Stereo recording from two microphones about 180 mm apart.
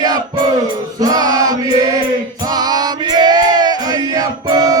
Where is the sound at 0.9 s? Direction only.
20° right (ahead or behind).